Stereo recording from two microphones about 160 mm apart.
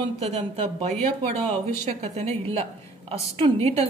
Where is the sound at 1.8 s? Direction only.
45° right (ahead or behind).